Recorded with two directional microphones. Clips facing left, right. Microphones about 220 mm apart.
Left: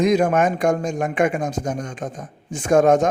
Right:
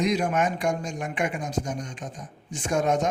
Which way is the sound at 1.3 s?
90° left.